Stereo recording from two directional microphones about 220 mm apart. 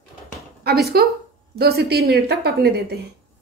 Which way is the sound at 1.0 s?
45° right (ahead or behind).